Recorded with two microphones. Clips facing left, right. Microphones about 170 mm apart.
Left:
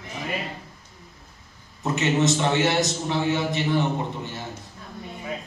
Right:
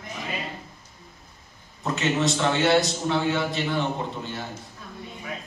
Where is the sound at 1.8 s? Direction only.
20° left (ahead or behind).